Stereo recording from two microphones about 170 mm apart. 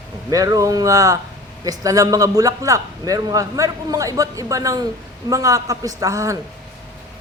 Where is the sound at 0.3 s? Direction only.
20° right (ahead or behind).